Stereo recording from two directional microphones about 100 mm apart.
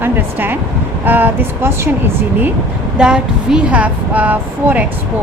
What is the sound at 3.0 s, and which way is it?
Speech, 10° right (ahead or behind).